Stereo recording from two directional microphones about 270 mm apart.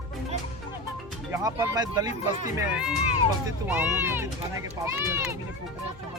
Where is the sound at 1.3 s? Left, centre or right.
Centre.